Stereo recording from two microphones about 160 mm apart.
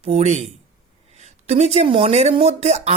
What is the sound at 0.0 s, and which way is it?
Speech, 45° right (ahead or behind).